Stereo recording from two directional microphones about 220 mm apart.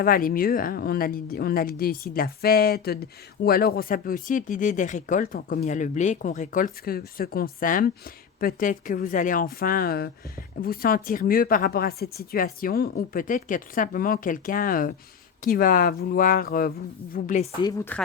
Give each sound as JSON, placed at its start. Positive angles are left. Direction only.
{"t": 0.0, "sound": "speech", "side_deg": 40}
{"t": 17.6, "sound": "speech", "side_deg": 15}